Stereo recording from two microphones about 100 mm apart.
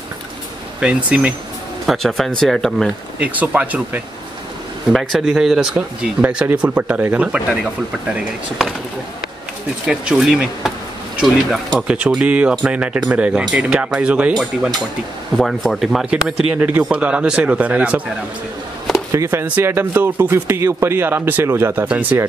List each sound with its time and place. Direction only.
0.7 s speech: 10° right (ahead or behind)
1.9 s speech: centre (ahead or behind)
3.2 s speech: 15° right (ahead or behind)
4.9 s speech: centre (ahead or behind); by 7.4 s 20° right (ahead or behind)
9.8 s speech: 5° right (ahead or behind)
16.5 s speech: 20° right (ahead or behind)
19.1 s speech: 25° right (ahead or behind)
21.8 s speech: 10° right (ahead or behind)